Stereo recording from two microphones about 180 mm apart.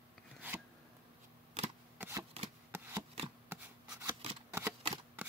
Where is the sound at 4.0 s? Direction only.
30° right (ahead or behind).